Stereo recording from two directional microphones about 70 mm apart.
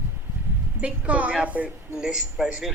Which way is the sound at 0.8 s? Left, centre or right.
Centre.